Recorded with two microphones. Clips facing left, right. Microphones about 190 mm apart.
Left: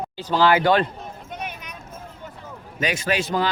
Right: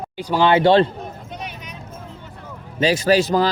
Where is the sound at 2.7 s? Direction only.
35° right (ahead or behind).